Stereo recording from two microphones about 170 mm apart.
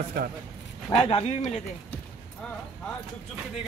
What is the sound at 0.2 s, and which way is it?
Speech, 65° right (ahead or behind).